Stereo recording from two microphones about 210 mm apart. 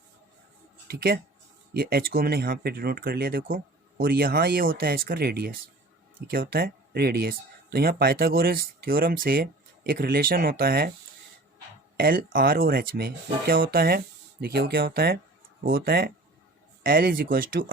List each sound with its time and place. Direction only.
0.9 s speech: 50° right (ahead or behind)
11.9 s speech: 45° right (ahead or behind)